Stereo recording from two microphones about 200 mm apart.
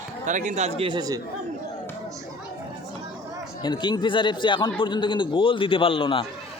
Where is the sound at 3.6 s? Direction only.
20° left (ahead or behind).